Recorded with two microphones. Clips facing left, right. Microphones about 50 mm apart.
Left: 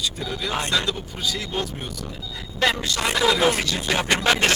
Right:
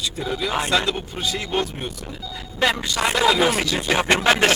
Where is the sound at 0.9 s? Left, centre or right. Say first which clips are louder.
Right 2 dB; right.